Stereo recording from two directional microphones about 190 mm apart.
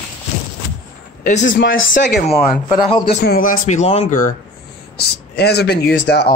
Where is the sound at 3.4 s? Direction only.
40° left (ahead or behind).